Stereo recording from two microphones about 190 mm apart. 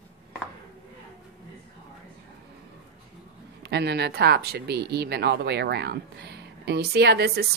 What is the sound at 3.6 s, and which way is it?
Speech, 60° right (ahead or behind).